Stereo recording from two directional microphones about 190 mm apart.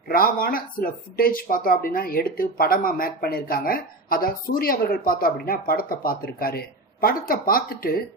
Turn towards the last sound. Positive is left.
turn(degrees=50)  # may be behind; listen again after turning